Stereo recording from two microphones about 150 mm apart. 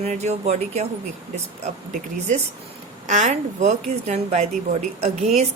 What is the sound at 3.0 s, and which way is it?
A woman's voice, 55° right (ahead or behind).